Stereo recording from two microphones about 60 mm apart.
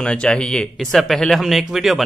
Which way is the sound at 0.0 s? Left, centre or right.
Centre.